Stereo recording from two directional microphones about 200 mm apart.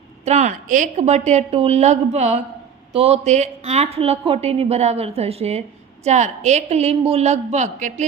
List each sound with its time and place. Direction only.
0.3 s speech: 35° right (ahead or behind)